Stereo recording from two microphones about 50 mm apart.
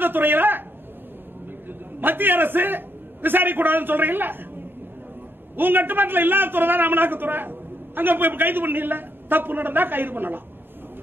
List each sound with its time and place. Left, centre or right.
0.0 s a man's voice: right
1.7 s a man's voice: right
5.6 s a man's voice: right